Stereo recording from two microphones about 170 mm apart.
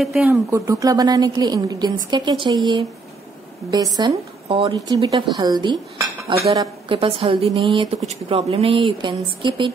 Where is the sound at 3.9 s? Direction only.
30° right (ahead or behind).